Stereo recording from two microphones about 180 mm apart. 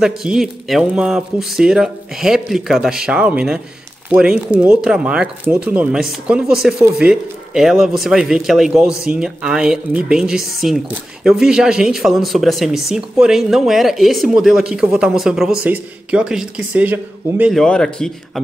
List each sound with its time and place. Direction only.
0.0 s speech: 5° right (ahead or behind)